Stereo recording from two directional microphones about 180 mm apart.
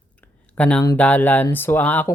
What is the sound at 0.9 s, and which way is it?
Speech, 10° left (ahead or behind).